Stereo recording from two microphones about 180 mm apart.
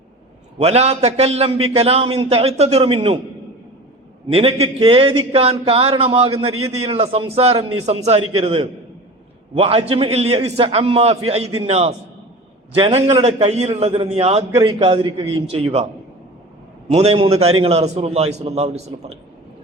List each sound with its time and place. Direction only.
0.6 s a man's voice: 35° right (ahead or behind)
4.3 s a man's voice: 35° right (ahead or behind)
16.9 s a man's voice: 35° right (ahead or behind)